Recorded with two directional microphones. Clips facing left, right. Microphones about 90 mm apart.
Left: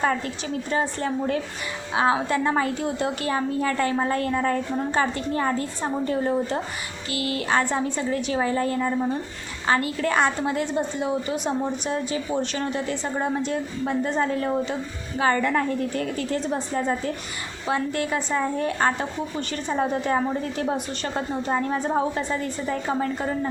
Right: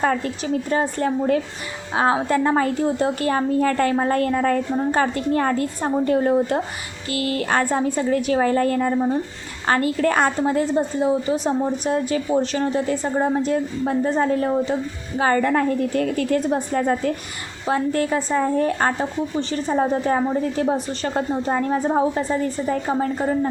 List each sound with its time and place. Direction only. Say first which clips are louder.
0.0 s a woman's voice: right 3 dB; 40° right (ahead or behind)
17.7 s a woman's voice: right 4 dB; 40° right (ahead or behind)